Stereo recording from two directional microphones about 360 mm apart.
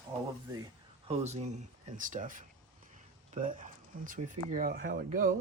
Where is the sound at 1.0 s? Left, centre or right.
Centre.